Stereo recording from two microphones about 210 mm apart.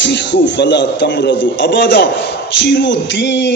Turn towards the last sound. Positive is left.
turn(degrees=55)  # may be behind; listen again after turning